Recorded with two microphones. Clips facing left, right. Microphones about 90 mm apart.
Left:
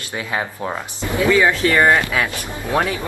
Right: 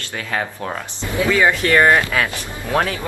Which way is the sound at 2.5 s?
15° left (ahead or behind).